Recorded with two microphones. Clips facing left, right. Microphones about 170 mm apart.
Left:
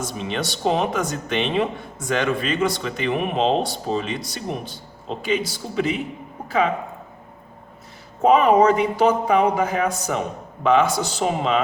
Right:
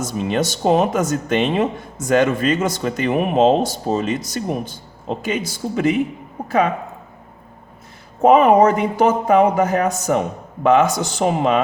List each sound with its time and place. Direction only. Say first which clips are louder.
0.0 s speech: right 6 dB; 45° right (ahead or behind)
8.2 s speech: right 3 dB; 50° right (ahead or behind)